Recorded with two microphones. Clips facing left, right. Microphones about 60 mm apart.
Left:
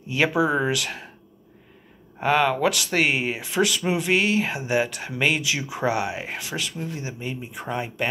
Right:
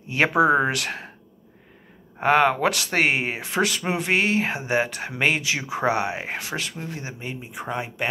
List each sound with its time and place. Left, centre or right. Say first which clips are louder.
0.1 s speech: right 3 dB; right
2.1 s speech: right 2 dB; right